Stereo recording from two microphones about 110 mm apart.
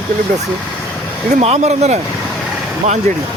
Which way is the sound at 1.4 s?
80° right.